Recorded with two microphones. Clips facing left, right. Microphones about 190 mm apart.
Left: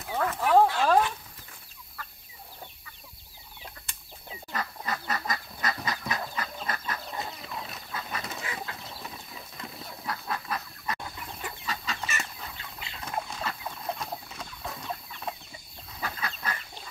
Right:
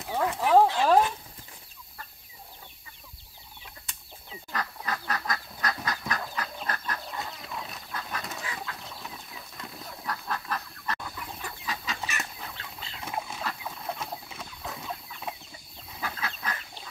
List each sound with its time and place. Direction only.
0.0 s chicken: 15° right (ahead or behind)
4.5 s duck: 5° left (ahead or behind)
6.3 s chicken: 5° left (ahead or behind)
9.0 s duck: centre (ahead or behind)
11.6 s chicken: centre (ahead or behind)
16.0 s fowl: 5° right (ahead or behind)